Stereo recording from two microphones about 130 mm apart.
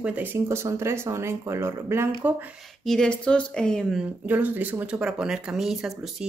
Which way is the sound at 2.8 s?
5° left (ahead or behind).